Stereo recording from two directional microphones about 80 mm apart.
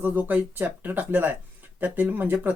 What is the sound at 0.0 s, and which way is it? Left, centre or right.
Speech, right.